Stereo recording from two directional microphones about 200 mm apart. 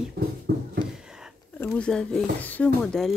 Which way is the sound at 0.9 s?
5° right (ahead or behind).